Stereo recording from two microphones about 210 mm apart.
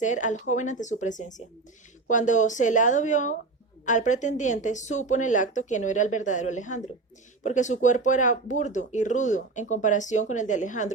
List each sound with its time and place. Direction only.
0.0 s speech: 35° left (ahead or behind)